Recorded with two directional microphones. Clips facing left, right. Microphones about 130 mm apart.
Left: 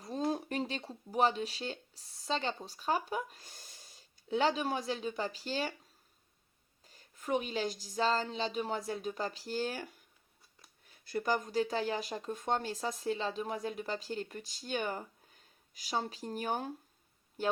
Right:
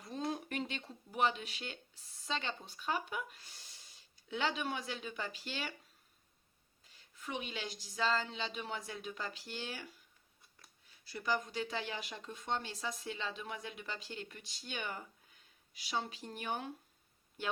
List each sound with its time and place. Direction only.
0.0 s speech: 35° left (ahead or behind)
6.8 s speech: 45° left (ahead or behind)